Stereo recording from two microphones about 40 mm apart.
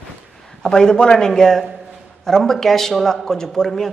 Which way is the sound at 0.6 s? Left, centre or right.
Centre.